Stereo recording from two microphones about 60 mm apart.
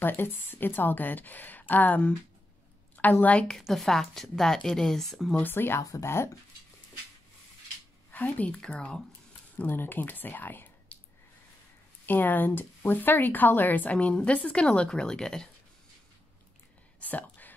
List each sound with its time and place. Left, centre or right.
0.0 s a woman's voice: left
3.6 s speech: centre
5.3 s a woman's voice: left
5.8 s speech: left
6.0 s speech: left
8.1 s speech: left
8.5 s speech: centre
9.6 s a woman's voice: left
12.1 s speech: left; by 15.5 s centre
17.0 s whispering: left